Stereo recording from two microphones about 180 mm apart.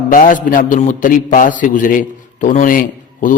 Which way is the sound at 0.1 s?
45° left (ahead or behind).